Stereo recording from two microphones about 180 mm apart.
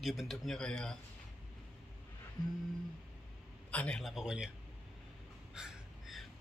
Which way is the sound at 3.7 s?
5° left (ahead or behind).